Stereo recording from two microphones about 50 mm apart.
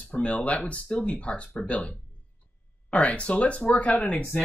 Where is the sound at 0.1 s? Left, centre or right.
Left.